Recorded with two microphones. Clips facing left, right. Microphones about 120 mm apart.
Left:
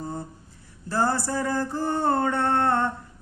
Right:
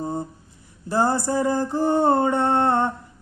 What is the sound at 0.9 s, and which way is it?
Mantra, 15° right (ahead or behind).